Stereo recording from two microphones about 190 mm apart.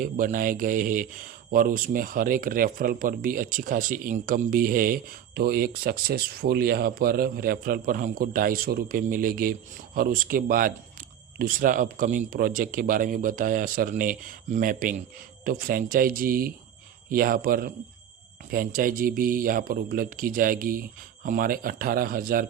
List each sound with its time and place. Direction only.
0.0 s speech: 45° right (ahead or behind)